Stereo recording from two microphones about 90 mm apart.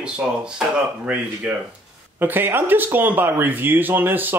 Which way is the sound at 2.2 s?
25° right (ahead or behind).